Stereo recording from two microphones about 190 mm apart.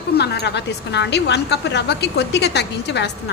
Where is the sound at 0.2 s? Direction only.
60° left (ahead or behind).